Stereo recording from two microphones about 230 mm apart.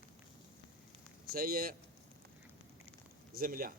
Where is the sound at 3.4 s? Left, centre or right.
Right.